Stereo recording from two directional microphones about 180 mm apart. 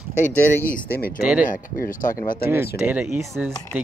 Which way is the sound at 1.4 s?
45° left (ahead or behind).